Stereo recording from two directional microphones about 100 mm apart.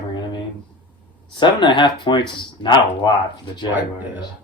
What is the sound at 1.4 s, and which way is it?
Speech, 50° left (ahead or behind).